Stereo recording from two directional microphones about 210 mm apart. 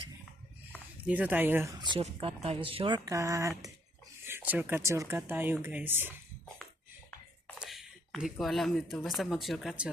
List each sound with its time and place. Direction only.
1.0 s speech: 5° right (ahead or behind)
1.8 s speech: 25° right (ahead or behind)
7.4 s speech: centre (ahead or behind)